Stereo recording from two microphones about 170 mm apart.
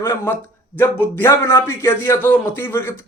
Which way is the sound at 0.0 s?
15° left (ahead or behind).